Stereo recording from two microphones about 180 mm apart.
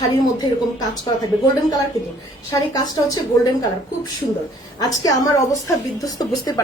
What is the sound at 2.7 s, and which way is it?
Speech, 20° left (ahead or behind).